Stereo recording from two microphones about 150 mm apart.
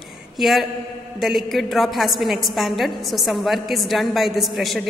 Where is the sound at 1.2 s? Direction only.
Centre (ahead or behind).